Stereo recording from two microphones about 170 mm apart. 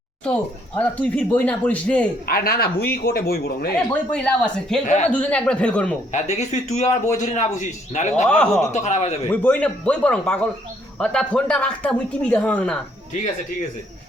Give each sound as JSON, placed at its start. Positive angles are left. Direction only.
{"t": 0.8, "sound": "speech", "side_deg": 10}
{"t": 2.2, "sound": "speech", "side_deg": 60}
{"t": 3.8, "sound": "speech", "side_deg": 5}
{"t": 6.1, "sound": "a man's voice", "side_deg": 45}
{"t": 8.3, "sound": "speech", "side_deg": 10}
{"t": 8.7, "sound": "speech", "side_deg": 40}
{"t": 9.3, "sound": "speech", "side_deg": 10}